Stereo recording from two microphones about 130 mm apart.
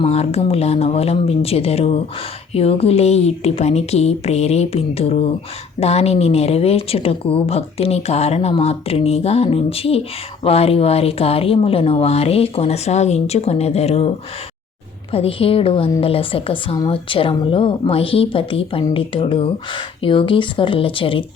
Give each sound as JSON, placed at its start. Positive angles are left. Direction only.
{"t": 0.0, "sound": "a woman's voice", "side_deg": 50}
{"t": 15.1, "sound": "a woman's voice", "side_deg": 45}